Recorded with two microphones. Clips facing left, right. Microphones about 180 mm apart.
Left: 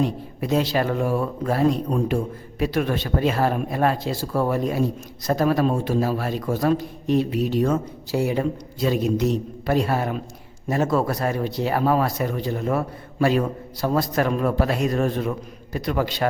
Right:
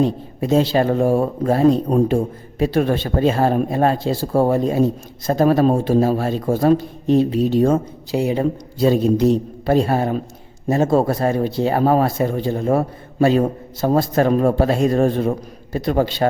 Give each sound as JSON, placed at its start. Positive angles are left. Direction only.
{"t": 0.0, "sound": "speech", "side_deg": -25}
{"t": 8.8, "sound": "a man's voice", "side_deg": -30}